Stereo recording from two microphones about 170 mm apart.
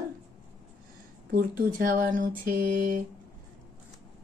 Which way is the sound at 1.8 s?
50° right (ahead or behind).